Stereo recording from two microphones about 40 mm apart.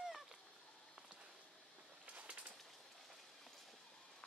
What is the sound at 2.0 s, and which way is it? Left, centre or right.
Bird, right.